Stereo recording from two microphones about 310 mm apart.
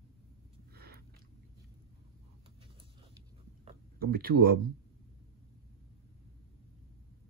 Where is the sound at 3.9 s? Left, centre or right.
Right.